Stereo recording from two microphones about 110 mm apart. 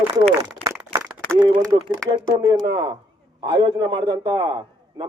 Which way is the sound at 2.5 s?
45° right (ahead or behind).